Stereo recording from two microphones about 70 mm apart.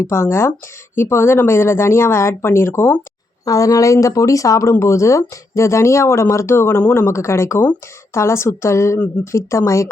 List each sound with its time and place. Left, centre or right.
0.0 s speech: left
3.4 s speech: left